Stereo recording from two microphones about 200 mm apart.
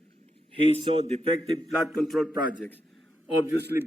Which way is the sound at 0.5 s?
35° left (ahead or behind).